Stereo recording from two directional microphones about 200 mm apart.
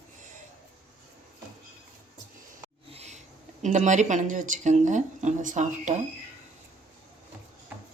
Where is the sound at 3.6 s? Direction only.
35° right (ahead or behind).